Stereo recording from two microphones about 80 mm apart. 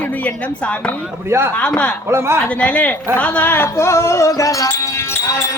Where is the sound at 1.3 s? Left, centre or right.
Right.